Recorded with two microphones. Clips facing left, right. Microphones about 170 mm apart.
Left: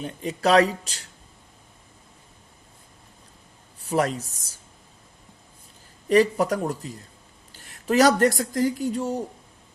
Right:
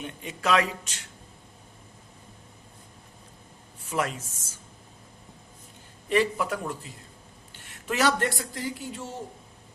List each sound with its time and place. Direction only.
0.0 s speech: 35° left (ahead or behind)
3.8 s speech: 35° left (ahead or behind)
6.1 s speech: 40° left (ahead or behind)